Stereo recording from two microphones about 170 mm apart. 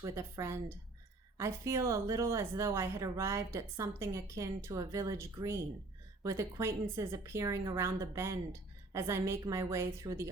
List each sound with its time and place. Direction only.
0.0 s speech: 15° right (ahead or behind)